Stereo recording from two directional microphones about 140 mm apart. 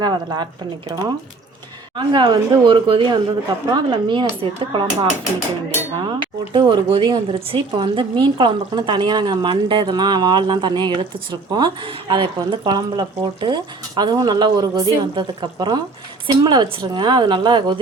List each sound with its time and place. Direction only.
0.0 s a woman's voice: 30° right (ahead or behind)
6.1 s speech: 35° right (ahead or behind)